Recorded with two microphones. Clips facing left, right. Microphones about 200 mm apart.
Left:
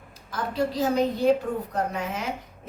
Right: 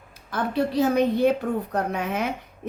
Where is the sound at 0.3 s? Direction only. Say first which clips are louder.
Right 3 dB; 60° right (ahead or behind).